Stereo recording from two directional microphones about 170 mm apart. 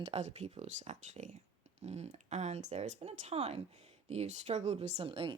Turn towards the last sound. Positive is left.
turn(degrees=-35)  # may be behind; listen again after turning